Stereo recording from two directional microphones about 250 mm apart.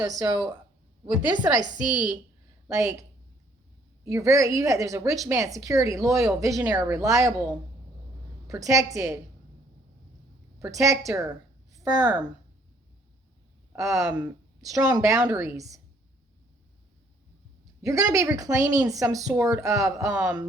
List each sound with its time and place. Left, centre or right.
0.2 s a woman's voice: centre
1.9 s a woman's voice: centre
2.7 s a woman's voice: centre
8.4 s a woman's voice: centre
10.6 s a woman's voice: centre
13.7 s a woman's voice: centre
17.8 s a woman's voice: centre